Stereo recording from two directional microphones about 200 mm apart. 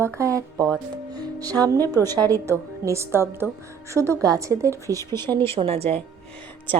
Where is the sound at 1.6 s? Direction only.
20° right (ahead or behind).